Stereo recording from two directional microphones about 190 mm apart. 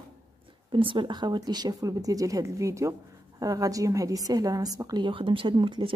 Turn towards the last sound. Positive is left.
turn(degrees=-25)  # may be behind; listen again after turning